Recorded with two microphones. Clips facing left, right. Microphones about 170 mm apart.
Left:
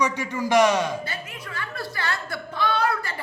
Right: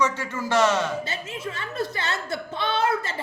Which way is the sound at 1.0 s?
25° right (ahead or behind).